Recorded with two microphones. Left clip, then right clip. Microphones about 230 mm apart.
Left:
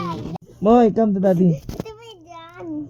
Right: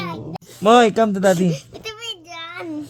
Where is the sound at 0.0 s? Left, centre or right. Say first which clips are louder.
Left 1 dB; centre.